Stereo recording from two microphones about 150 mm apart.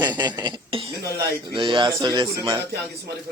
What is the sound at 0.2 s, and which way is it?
A man's voice, 30° right (ahead or behind).